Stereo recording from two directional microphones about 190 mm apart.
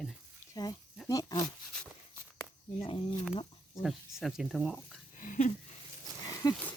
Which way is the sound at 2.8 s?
30° left (ahead or behind).